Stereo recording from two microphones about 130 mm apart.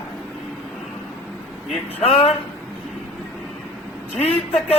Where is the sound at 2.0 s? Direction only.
50° left (ahead or behind).